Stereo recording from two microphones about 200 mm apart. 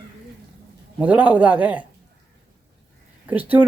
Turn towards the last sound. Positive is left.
turn(degrees=-10)  # may be behind; listen again after turning